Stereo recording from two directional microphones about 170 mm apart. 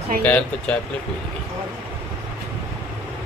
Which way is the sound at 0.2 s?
10° left (ahead or behind).